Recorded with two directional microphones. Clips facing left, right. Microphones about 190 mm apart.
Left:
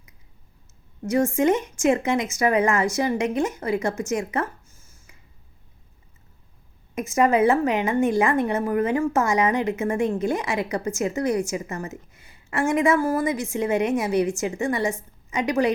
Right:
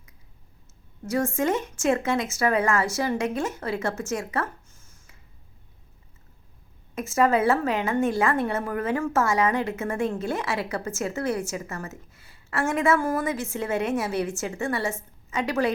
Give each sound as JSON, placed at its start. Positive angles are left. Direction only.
{"t": 1.0, "sound": "a woman's voice", "side_deg": 15}
{"t": 6.9, "sound": "a woman's voice", "side_deg": 15}